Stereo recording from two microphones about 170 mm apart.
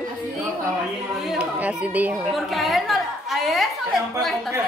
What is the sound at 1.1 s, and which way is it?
A woman's voice, 5° right (ahead or behind).